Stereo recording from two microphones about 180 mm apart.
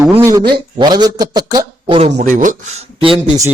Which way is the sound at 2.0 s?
40° right (ahead or behind).